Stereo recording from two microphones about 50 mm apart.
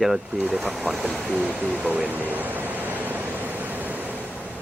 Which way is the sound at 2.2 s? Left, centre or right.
Right.